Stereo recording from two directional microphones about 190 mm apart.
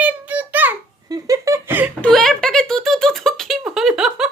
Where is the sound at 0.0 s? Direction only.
10° right (ahead or behind).